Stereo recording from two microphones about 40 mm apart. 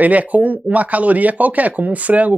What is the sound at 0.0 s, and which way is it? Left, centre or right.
Speech, right.